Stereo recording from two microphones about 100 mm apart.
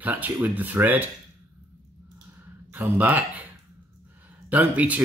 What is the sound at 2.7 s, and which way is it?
Speech, 20° right (ahead or behind).